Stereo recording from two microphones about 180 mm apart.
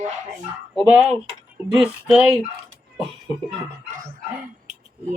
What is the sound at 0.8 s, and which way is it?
Speech, 5° right (ahead or behind).